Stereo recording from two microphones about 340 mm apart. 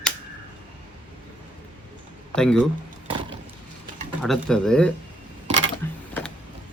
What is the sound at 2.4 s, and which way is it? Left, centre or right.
Speech, centre.